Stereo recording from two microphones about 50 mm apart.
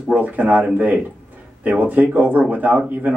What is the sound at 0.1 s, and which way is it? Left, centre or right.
Speech, right.